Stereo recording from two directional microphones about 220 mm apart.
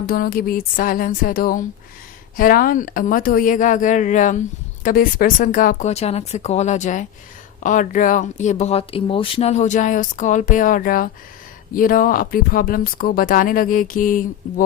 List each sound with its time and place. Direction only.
0.0 s a woman's voice: 40° left (ahead or behind)